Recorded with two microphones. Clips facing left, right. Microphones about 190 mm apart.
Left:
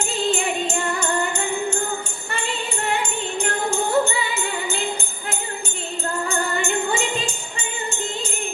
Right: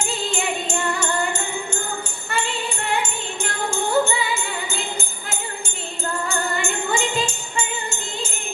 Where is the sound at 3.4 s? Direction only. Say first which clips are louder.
Left 2 dB; 35° left (ahead or behind).